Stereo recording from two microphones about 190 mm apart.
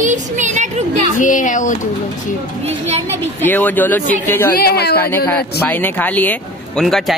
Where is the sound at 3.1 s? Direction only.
10° left (ahead or behind).